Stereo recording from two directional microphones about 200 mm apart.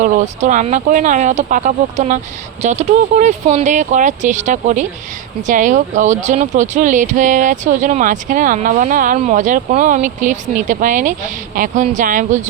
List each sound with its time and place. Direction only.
0.0 s speech: 40° right (ahead or behind)